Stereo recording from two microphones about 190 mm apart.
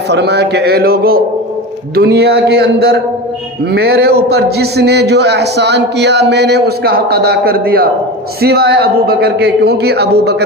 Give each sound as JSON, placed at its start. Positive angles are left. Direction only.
{"t": 0.1, "sound": "a man's voice", "side_deg": -60}